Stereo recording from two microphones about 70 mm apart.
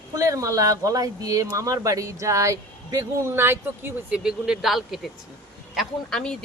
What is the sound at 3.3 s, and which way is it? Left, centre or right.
Speech, right.